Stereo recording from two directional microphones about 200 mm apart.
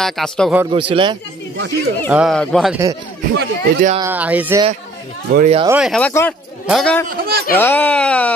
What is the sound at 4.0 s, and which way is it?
Speech, 10° right (ahead or behind).